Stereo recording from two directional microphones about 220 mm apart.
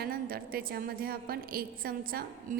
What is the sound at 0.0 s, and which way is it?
A woman's voice, 45° right (ahead or behind).